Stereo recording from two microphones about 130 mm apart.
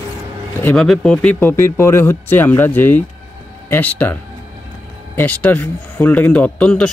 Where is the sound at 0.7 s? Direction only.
5° left (ahead or behind).